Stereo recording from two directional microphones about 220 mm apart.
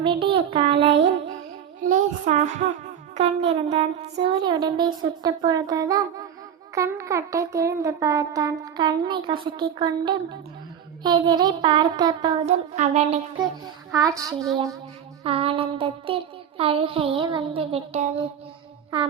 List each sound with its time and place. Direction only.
0.3 s speech: 25° right (ahead or behind)
1.8 s child singing: 35° right (ahead or behind)
3.2 s speech: 25° right (ahead or behind)
6.7 s a sound: 15° right (ahead or behind)
8.7 s speech: 20° right (ahead or behind)
13.9 s a sound: 15° right (ahead or behind)
15.2 s speech: 25° right (ahead or behind)